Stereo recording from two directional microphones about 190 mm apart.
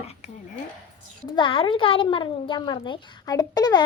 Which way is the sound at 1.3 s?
25° left (ahead or behind).